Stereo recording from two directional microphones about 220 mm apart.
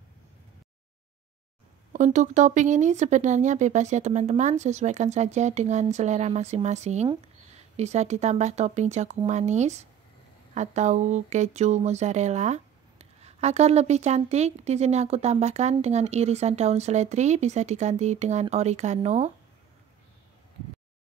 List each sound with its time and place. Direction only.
1.9 s speech: 35° right (ahead or behind)